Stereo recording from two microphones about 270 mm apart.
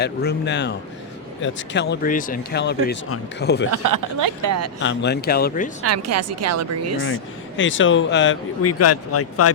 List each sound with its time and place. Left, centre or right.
0.0 s speech: left
4.4 s a woman's voice: right
4.8 s speech: left
5.8 s a woman's voice: right
7.1 s speech: left
8.6 s speech: left